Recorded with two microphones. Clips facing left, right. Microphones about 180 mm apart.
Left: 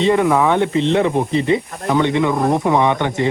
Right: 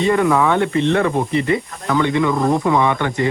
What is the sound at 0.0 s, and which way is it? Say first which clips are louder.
Speech: left 1 dB; 15° left (ahead or behind).